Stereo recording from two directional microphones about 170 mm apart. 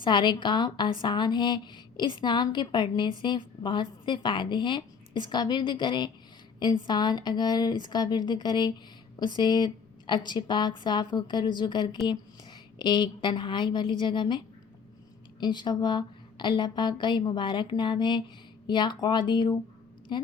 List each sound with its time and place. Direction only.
0.0 s a woman's voice: 25° left (ahead or behind)